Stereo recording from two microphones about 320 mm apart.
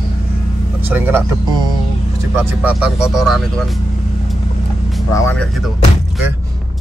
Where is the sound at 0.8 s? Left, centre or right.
Centre.